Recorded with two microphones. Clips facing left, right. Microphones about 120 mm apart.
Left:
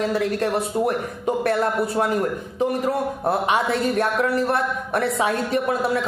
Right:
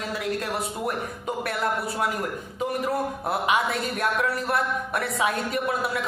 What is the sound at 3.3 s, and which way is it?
A man's voice, 30° left (ahead or behind).